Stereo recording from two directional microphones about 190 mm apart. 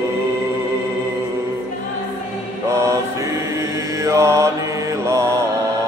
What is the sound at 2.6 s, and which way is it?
Mantra, 15° right (ahead or behind).